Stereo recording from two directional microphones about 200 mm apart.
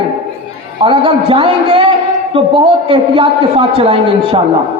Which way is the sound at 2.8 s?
25° right (ahead or behind).